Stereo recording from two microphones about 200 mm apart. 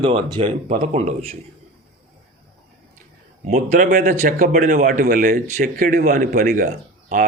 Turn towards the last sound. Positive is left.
turn(degrees=-40)  # may be behind; listen again after turning